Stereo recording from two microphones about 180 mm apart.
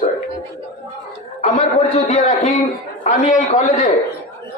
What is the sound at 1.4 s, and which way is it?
A man's voice, 40° left (ahead or behind).